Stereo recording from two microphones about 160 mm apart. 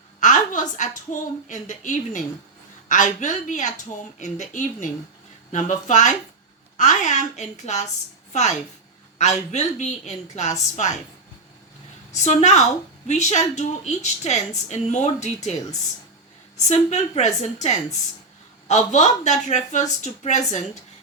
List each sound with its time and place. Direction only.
0.2 s a woman's voice: 50° left (ahead or behind)
12.1 s a woman's voice: 45° left (ahead or behind)
16.6 s a woman's voice: 45° left (ahead or behind)